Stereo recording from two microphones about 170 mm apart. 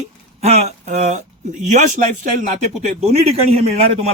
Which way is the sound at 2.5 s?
40° right (ahead or behind).